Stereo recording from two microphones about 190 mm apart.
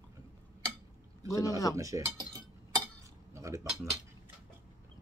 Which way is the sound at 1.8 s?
15° right (ahead or behind).